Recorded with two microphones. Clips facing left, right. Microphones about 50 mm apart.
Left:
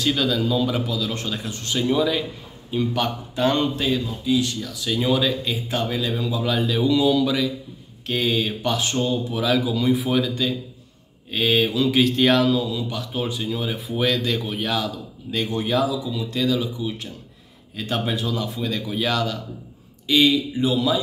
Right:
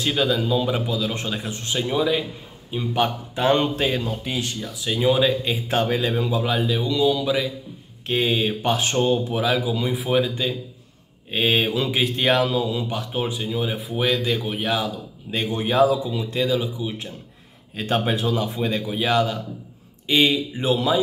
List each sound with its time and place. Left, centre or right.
0.0 s a man's voice: right
3.7 s speech: right
4.6 s a man's voice: right
5.7 s speech: right
6.4 s speech: centre
6.8 s a man's voice: centre
8.1 s a man's voice: right
9.7 s speech: centre
10.1 s a man's voice: right
11.9 s a man's voice: centre
13.2 s a man's voice: centre
17.7 s speech: right
18.8 s a man's voice: centre